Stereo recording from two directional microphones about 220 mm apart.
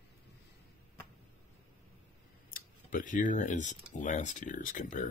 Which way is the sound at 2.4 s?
40° left (ahead or behind).